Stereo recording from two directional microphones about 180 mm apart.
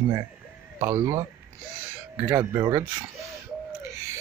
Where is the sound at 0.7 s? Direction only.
15° right (ahead or behind).